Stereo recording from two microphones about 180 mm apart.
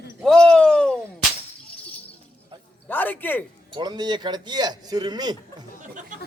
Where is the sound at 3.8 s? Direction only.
25° right (ahead or behind).